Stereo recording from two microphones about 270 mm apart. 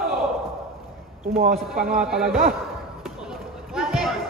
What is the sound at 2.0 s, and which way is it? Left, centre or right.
Speech, centre.